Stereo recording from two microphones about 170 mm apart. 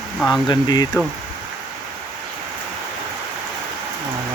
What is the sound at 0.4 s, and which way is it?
Speech, 25° left (ahead or behind).